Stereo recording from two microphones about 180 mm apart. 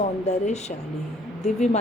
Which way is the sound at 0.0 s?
40° left (ahead or behind).